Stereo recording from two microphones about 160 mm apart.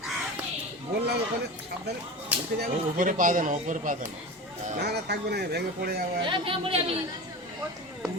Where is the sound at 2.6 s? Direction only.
60° right (ahead or behind).